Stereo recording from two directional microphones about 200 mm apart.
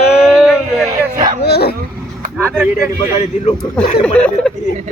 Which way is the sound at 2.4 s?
10° right (ahead or behind).